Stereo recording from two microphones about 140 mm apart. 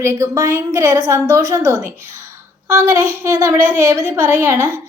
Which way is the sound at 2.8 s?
20° right (ahead or behind).